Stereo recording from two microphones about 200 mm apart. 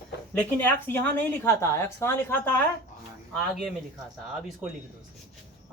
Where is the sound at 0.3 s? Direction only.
10° left (ahead or behind).